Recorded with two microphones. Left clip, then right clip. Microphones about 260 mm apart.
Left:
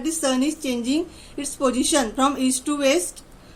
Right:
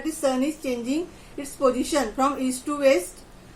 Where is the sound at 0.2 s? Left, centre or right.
Left.